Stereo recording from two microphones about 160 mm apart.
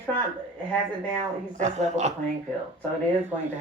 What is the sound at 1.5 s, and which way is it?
Speech, 45° right (ahead or behind).